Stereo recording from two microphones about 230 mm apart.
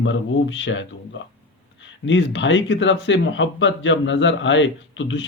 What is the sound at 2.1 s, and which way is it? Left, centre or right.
Speech, left.